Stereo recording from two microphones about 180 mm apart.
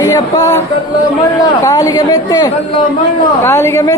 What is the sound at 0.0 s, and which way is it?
Music, 20° left (ahead or behind).